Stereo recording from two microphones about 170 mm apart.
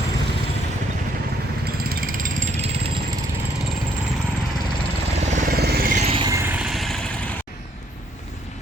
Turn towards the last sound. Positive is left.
turn(degrees=-15)  # may be behind; listen again after turning